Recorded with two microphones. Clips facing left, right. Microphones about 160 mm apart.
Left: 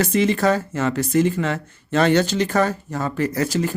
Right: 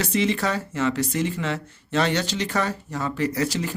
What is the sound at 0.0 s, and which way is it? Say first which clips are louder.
Speech: left 5 dB; 50° left (ahead or behind).